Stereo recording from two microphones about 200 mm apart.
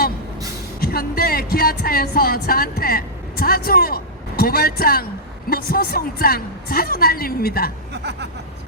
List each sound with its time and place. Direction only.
0.8 s a woman's voice: 50° left (ahead or behind)
7.9 s speech: 55° right (ahead or behind)